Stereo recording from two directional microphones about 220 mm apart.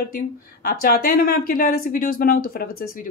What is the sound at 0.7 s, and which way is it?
Speech, 45° left (ahead or behind).